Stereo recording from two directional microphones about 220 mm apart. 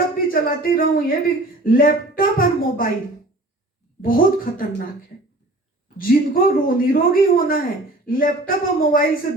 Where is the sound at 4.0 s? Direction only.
40° left (ahead or behind).